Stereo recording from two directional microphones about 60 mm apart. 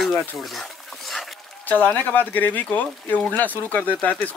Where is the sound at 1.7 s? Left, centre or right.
Left.